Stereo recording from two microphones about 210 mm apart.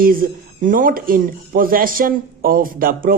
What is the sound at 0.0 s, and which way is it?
Speech, 40° right (ahead or behind).